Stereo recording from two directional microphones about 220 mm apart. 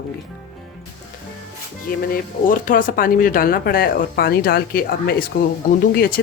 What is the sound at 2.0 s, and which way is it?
Speech, 40° left (ahead or behind).